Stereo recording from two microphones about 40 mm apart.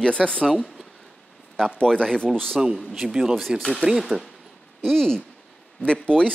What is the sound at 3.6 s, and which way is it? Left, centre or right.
Speech, centre.